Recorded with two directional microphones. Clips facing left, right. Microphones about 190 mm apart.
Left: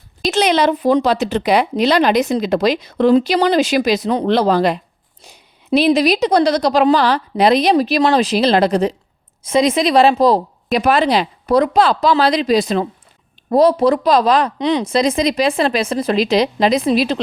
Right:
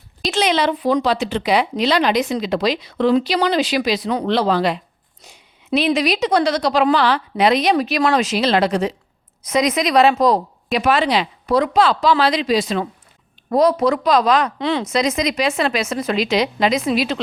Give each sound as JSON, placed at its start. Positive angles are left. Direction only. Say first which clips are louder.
{"t": 0.3, "sound": "speech", "louder": "left 3 dB", "side_deg": 40}
{"t": 14.6, "sound": "speech", "louder": "left 4 dB", "side_deg": 20}
{"t": 14.8, "sound": "speech", "louder": "left 3 dB", "side_deg": 30}